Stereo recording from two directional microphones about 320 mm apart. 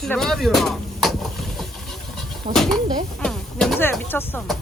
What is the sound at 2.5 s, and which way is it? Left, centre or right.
Speech, centre.